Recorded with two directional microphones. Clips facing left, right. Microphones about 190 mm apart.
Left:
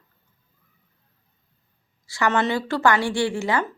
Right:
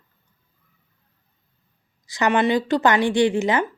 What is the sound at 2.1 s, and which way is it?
Speech, 20° right (ahead or behind).